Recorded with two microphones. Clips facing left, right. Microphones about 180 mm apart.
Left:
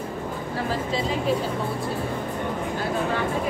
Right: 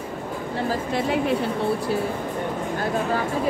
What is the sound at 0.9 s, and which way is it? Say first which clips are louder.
Speech: right 2 dB; 60° right (ahead or behind).